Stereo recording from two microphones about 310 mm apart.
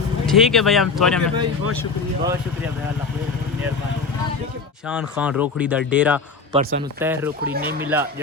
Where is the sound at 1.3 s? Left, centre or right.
Right.